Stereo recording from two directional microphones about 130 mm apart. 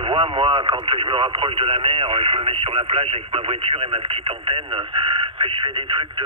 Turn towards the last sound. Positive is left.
turn(degrees=-40)  # may be behind; listen again after turning